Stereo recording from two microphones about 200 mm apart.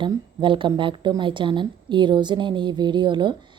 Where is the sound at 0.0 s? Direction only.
25° right (ahead or behind).